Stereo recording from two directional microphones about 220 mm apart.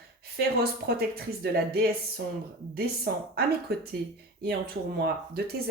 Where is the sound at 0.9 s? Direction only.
45° right (ahead or behind).